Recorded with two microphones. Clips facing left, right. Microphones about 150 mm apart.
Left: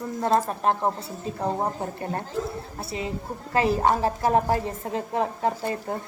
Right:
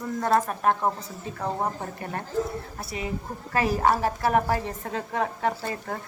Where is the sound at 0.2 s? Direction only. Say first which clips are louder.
Left 1 dB; 25° left (ahead or behind).